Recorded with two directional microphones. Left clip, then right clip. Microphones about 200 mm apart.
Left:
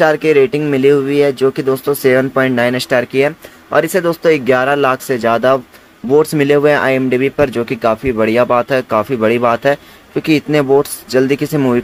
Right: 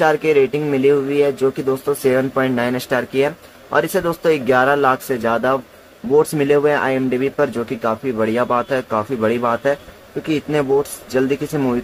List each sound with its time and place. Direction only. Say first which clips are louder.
0.0 s speech: left 4 dB; 20° left (ahead or behind)